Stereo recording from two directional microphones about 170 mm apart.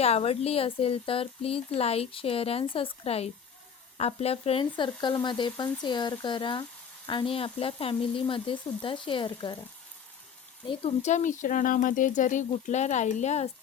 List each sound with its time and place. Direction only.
0.0 s a woman's voice: 35° left (ahead or behind)
4.6 s a woman's voice: 25° left (ahead or behind)
10.7 s speech: 40° left (ahead or behind)